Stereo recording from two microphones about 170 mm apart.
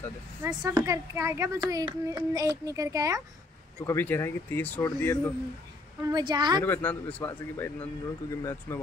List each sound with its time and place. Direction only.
0.4 s a child's voice: 15° right (ahead or behind)
3.8 s a man's voice: 15° left (ahead or behind)
6.0 s a child's voice: 25° right (ahead or behind)
6.6 s a man's voice: 10° left (ahead or behind)